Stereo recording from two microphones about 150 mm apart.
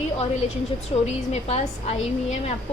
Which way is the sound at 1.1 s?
45° left (ahead or behind).